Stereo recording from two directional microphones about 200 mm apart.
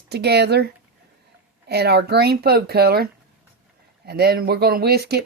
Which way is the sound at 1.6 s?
55° right (ahead or behind).